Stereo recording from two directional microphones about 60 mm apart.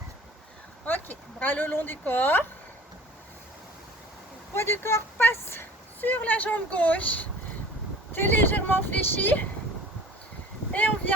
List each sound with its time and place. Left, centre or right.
0.9 s speech: left
4.5 s speech: left
6.0 s speech: left
10.7 s a sound: left